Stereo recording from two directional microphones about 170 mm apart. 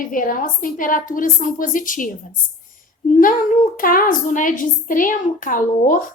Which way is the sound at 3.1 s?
50° left (ahead or behind).